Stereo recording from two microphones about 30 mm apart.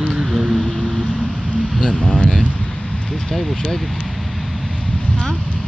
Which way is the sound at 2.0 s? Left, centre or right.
Left.